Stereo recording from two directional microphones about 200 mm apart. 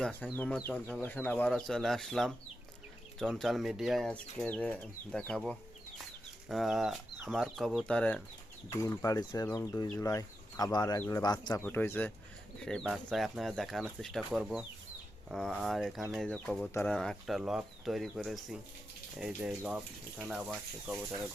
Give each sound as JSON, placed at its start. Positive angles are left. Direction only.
{"t": 0.0, "sound": "speech", "side_deg": 5}